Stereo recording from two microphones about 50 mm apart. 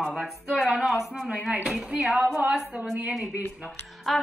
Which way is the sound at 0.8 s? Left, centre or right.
Centre.